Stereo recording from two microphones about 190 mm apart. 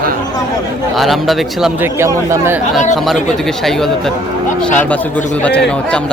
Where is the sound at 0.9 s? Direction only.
Centre (ahead or behind).